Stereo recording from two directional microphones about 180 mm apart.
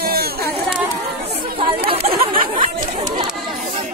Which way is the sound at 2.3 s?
45° right (ahead or behind).